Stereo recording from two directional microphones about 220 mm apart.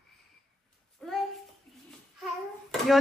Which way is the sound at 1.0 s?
Centre (ahead or behind).